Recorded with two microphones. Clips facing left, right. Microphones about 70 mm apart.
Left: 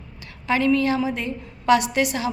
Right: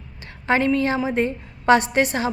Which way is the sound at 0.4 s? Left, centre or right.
Right.